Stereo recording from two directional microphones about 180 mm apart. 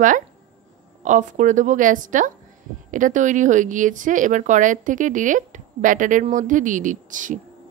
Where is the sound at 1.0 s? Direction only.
45° right (ahead or behind).